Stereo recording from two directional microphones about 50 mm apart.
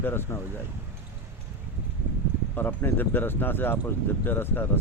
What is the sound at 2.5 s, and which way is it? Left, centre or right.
A man's voice, left.